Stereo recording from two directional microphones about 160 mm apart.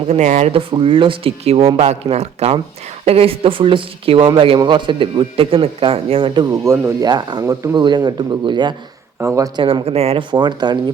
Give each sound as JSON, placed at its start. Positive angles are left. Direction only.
{"t": 0.1, "sound": "speech", "side_deg": -45}
{"t": 6.7, "sound": "speech", "side_deg": -20}
{"t": 9.6, "sound": "speech", "side_deg": -35}